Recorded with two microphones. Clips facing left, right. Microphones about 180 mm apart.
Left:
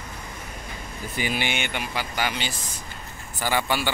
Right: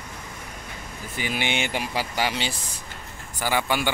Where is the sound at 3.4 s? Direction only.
10° right (ahead or behind).